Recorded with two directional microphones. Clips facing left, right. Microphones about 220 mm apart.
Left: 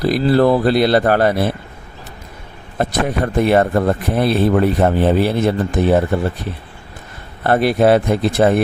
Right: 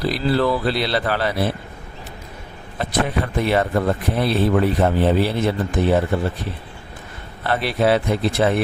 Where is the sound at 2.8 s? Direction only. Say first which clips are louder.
Left 4 dB; 45° left (ahead or behind).